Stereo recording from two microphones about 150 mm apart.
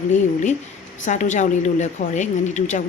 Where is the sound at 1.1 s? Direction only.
55° left (ahead or behind).